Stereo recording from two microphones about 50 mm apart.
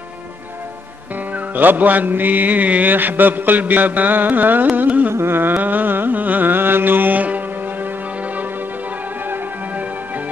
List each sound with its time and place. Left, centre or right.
1.3 s music: right
5.1 s music: right